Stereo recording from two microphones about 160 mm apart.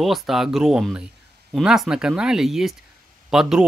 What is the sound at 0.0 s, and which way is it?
Speech, centre (ahead or behind).